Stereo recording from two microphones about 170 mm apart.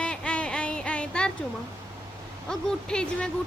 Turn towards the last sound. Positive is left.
turn(degrees=5)  # may be behind; listen again after turning